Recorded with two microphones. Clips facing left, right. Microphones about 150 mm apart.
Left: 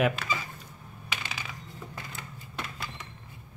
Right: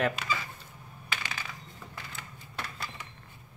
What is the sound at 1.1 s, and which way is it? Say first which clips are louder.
Coin: even; 15° left (ahead or behind).